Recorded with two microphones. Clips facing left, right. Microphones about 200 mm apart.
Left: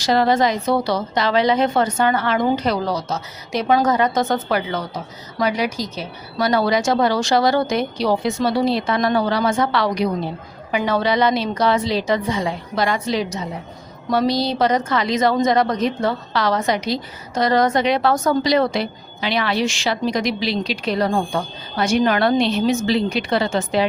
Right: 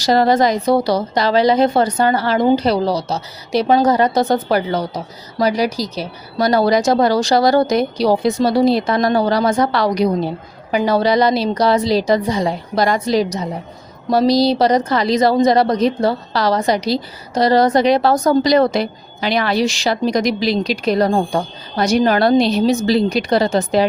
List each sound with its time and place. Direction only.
0.0 s a woman's voice: 40° right (ahead or behind)